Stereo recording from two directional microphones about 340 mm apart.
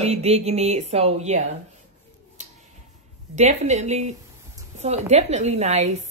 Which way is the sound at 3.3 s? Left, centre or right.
Centre.